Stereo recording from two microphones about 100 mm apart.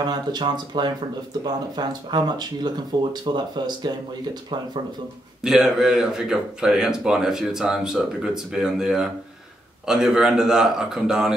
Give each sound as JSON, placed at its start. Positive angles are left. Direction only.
{"t": 0.0, "sound": "speech", "side_deg": -45}
{"t": 5.4, "sound": "speech", "side_deg": -5}